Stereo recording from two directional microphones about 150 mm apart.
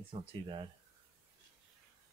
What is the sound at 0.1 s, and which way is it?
Speech, 40° right (ahead or behind).